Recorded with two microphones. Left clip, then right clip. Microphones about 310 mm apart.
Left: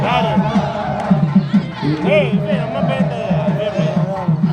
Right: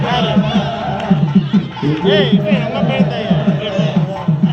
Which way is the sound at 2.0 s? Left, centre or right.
Left.